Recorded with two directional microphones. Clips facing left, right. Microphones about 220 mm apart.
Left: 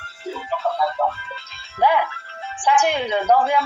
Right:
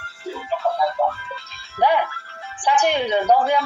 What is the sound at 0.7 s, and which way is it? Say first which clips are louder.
Music: right 1 dB; 15° right (ahead or behind).